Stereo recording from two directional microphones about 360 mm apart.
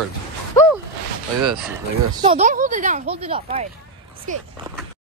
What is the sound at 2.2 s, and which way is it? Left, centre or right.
Speech, centre.